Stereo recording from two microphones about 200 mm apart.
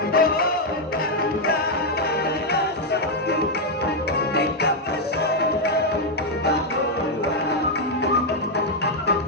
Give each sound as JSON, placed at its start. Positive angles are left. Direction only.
{"t": 0.1, "sound": "music", "side_deg": 50}